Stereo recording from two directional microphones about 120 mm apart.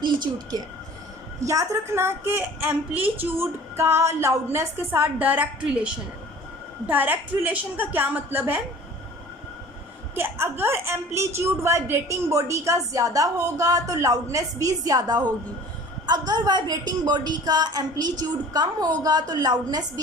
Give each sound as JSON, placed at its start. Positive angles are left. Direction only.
{"t": 0.0, "sound": "a woman's voice", "side_deg": -40}
{"t": 1.5, "sound": "a woman's voice", "side_deg": -25}
{"t": 10.2, "sound": "a woman's voice", "side_deg": -20}